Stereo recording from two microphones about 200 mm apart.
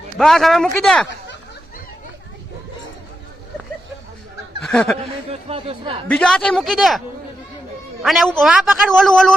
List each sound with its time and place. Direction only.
0.2 s a man's voice: centre (ahead or behind)
4.7 s a man's voice: 5° left (ahead or behind)
4.9 s a man's voice: 30° right (ahead or behind)
6.1 s a man's voice: 5° left (ahead or behind)
8.0 s a man's voice: centre (ahead or behind)